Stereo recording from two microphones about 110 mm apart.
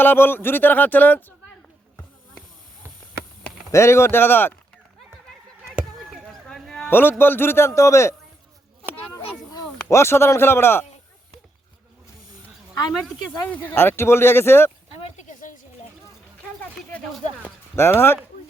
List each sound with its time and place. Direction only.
0.0 s speech: 20° left (ahead or behind)
3.7 s speech: 25° left (ahead or behind)
6.0 s a sound: centre (ahead or behind)
6.9 s speech: 20° left (ahead or behind)
9.1 s a sound: 35° left (ahead or behind)
9.9 s speech: 25° left (ahead or behind)
13.5 s speech: 15° left (ahead or behind)
14.9 s a sound: 70° left (ahead or behind)
17.4 s speech: 20° left (ahead or behind)